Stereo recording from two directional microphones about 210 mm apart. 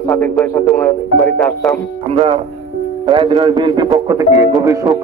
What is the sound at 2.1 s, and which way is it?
A man's voice, 30° right (ahead or behind).